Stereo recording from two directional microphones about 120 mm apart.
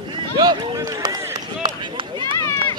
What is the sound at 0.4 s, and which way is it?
Speech, 35° right (ahead or behind).